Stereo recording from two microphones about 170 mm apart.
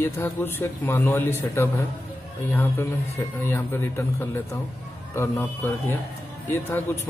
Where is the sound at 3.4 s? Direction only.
15° left (ahead or behind).